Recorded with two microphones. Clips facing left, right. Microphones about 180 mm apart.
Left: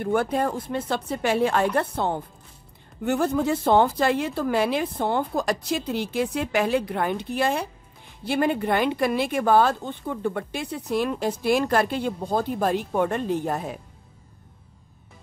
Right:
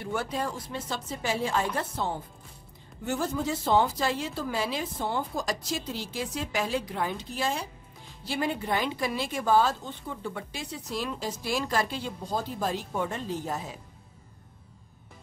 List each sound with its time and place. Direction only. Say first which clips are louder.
0.0 s speech: left 8 dB; 55° left (ahead or behind)